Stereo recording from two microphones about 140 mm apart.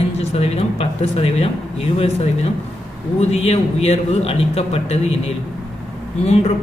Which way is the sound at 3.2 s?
50° left (ahead or behind).